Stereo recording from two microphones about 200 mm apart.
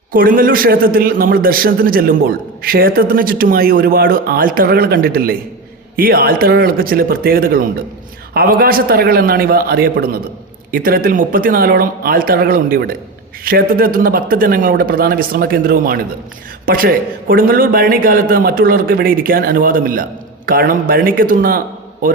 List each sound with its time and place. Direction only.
0.1 s a man's voice: 45° right (ahead or behind)